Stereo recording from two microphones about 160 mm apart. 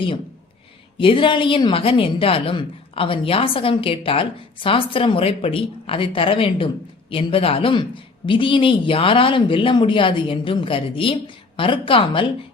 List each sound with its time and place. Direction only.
0.9 s a woman's voice: 35° left (ahead or behind)